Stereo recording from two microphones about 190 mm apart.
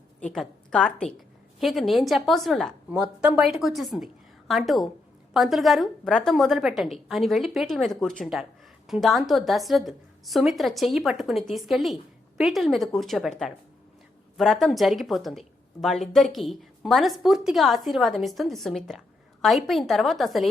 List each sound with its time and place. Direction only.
0.2 s a woman's voice: 5° left (ahead or behind)